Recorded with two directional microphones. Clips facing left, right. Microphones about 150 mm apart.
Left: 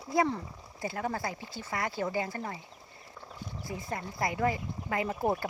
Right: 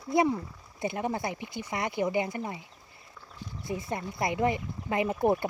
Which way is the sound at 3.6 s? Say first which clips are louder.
Right 4 dB; 20° right (ahead or behind).